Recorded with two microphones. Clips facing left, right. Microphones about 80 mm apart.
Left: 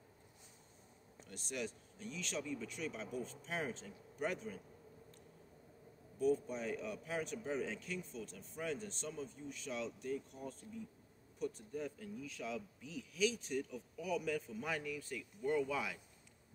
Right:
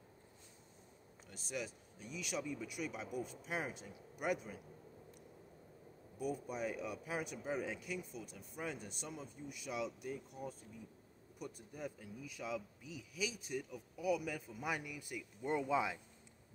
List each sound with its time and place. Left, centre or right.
1.3 s speech: centre
6.1 s speech: centre